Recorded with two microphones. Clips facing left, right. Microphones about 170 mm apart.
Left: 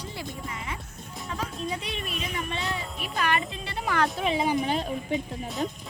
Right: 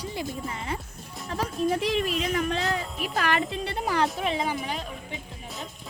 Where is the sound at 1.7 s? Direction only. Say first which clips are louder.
Right 8 dB; 80° right.